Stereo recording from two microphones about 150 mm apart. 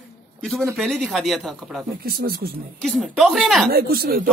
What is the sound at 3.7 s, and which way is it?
Speech, 90° right.